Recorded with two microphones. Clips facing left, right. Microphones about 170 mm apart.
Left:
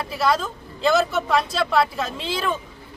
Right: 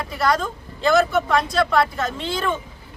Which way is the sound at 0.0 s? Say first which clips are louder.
Even; 5° left (ahead or behind).